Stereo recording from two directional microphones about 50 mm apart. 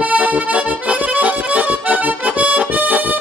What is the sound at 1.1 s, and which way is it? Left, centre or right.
Accordion, right.